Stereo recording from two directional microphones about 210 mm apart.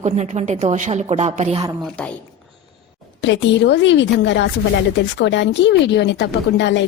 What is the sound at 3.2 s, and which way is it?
Speech, 60° left (ahead or behind).